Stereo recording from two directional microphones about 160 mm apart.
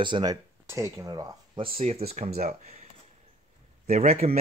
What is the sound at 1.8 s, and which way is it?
A man's voice, 40° right (ahead or behind).